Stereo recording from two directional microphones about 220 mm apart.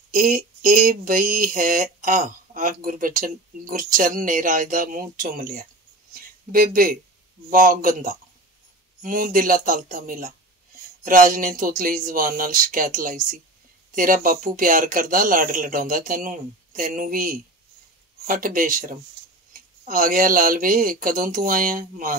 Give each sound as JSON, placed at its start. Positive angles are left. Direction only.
{"t": 0.1, "sound": "speech", "side_deg": -40}